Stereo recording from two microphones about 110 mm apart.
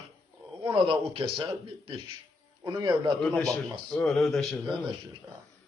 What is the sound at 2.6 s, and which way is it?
Speech, 35° right (ahead or behind).